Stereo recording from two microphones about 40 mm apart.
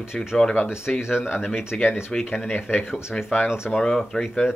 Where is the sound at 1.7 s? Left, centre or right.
Left.